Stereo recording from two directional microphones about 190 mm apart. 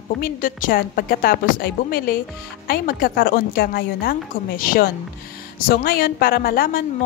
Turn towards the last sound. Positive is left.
turn(degrees=50)  # may be behind; listen again after turning